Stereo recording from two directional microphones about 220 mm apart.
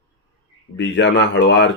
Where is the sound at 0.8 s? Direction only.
55° left (ahead or behind).